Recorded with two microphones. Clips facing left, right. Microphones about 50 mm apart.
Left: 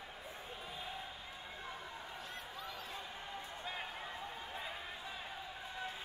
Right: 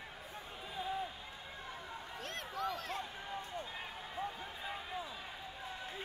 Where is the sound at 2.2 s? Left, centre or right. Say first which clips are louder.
Right 7 dB; right.